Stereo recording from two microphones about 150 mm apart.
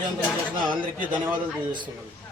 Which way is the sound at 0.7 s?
35° right (ahead or behind).